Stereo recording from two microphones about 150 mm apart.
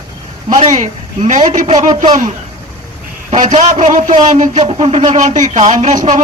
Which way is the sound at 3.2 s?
55° right (ahead or behind).